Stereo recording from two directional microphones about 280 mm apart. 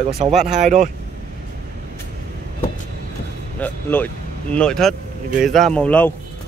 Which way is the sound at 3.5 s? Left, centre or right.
Centre.